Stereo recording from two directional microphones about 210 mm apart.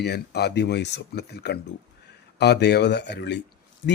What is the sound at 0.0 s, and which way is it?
Speech, 50° left (ahead or behind).